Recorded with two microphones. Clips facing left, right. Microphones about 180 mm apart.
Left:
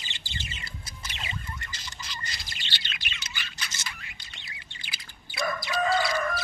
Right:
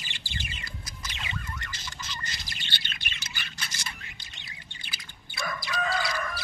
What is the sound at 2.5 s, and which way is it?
Bird, 45° right (ahead or behind).